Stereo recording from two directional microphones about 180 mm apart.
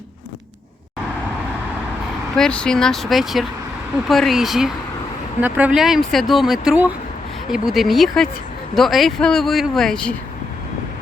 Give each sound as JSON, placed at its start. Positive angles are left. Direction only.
{"t": 2.3, "sound": "speech", "side_deg": 5}